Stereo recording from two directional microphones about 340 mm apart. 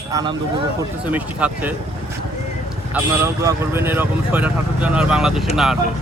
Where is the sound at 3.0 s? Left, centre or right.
Centre.